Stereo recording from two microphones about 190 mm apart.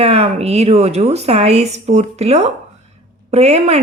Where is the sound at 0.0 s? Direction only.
30° right (ahead or behind).